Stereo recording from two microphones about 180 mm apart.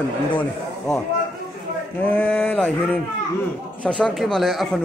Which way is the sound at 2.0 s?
10° left (ahead or behind).